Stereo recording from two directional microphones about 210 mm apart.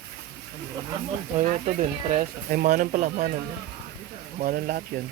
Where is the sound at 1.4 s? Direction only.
35° right (ahead or behind).